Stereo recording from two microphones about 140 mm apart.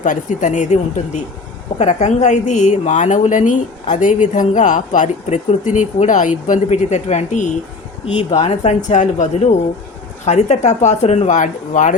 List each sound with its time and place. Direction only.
0.0 s a woman's voice: 65° left (ahead or behind)
8.1 s a woman's voice: 45° left (ahead or behind); by 11.9 s 65° left (ahead or behind)